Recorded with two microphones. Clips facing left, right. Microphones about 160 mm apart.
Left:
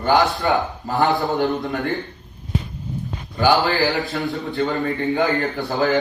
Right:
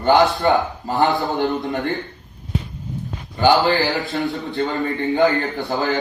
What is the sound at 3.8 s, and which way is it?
Speech, centre (ahead or behind).